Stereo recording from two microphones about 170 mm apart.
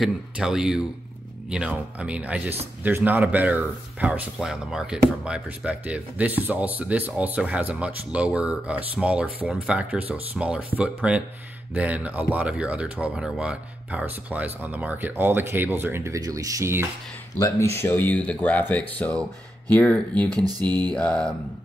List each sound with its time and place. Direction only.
0.0 s speech: 5° right (ahead or behind)
17.4 s speech: 15° left (ahead or behind)
20.2 s a sound: 25° right (ahead or behind)
20.9 s speech: 5° left (ahead or behind)